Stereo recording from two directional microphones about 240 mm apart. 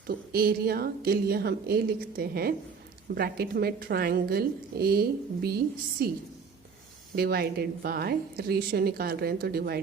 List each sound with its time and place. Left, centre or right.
0.3 s a woman's voice: right
7.2 s a woman's voice: right